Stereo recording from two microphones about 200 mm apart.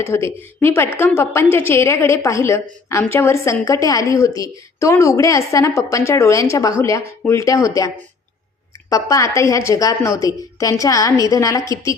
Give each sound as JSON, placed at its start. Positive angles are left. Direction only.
{"t": 0.1, "sound": "a woman's voice", "side_deg": 15}